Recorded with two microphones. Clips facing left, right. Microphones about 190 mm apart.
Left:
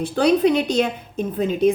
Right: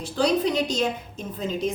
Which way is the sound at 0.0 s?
60° left (ahead or behind).